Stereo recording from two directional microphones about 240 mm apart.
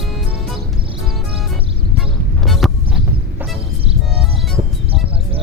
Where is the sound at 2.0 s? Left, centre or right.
Centre.